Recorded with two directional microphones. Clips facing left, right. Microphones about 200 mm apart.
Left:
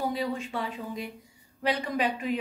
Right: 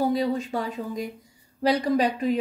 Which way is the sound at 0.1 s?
40° right (ahead or behind).